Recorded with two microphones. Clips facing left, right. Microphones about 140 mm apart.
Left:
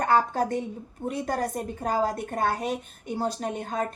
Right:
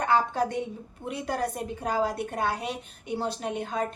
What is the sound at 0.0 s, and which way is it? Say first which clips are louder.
A woman's voice: left 1 dB; 45° left (ahead or behind).